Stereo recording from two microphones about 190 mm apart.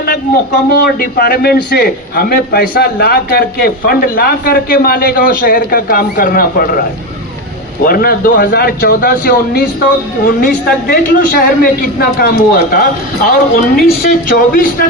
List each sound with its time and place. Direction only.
0.0 s a man's voice: 55° left (ahead or behind)
7.9 s a man's voice: 50° left (ahead or behind)